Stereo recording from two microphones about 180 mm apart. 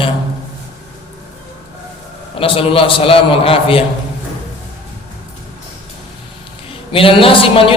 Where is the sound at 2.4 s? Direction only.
30° left (ahead or behind).